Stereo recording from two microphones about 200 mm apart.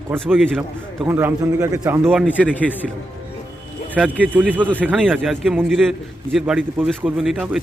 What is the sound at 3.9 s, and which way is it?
A man's voice, 10° right (ahead or behind).